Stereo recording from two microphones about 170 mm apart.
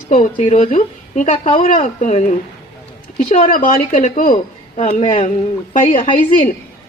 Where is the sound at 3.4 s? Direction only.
50° left (ahead or behind).